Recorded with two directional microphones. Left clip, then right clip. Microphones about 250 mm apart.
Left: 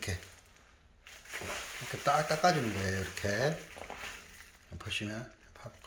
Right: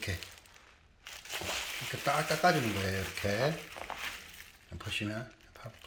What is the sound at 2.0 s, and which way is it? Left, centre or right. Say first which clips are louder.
Speech: left 1 dB; centre.